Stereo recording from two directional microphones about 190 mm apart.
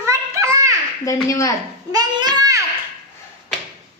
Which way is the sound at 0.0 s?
15° right (ahead or behind).